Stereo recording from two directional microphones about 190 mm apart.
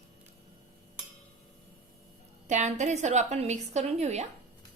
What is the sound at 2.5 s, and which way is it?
A woman's voice, 40° right (ahead or behind).